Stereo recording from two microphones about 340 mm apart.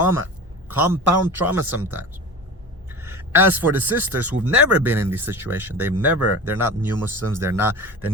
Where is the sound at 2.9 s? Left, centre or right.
Centre.